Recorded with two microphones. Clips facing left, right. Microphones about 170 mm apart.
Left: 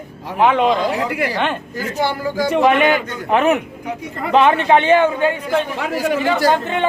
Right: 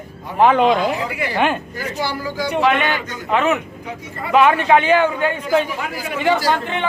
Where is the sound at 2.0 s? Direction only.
50° left (ahead or behind).